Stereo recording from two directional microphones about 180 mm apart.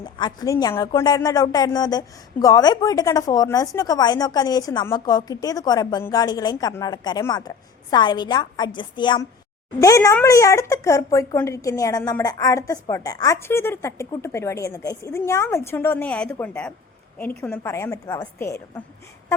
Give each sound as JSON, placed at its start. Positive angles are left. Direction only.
{"t": 0.0, "sound": "a woman's voice", "side_deg": 25}